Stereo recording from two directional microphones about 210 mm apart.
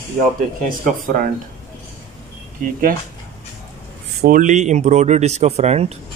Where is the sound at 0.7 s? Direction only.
40° right (ahead or behind).